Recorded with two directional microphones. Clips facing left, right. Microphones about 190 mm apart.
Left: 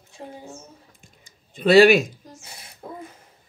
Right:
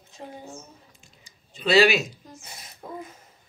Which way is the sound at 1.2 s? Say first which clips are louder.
Left 7 dB; 50° left (ahead or behind).